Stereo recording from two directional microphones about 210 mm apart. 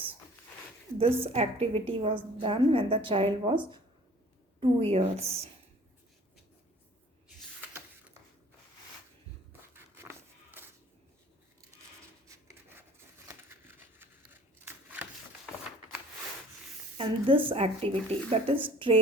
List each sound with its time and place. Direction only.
1.2 s speech: 30° right (ahead or behind)
4.6 s speech: 30° right (ahead or behind)
9.5 s a sound: 10° right (ahead or behind)
12.3 s rub: 15° right (ahead or behind)
13.2 s a sound: 10° right (ahead or behind)
17.0 s speech: 25° right (ahead or behind)